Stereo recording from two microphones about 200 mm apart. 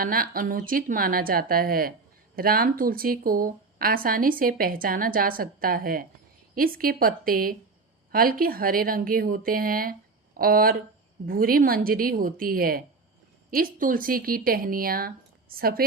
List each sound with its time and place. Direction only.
0.0 s speech: 45° right (ahead or behind)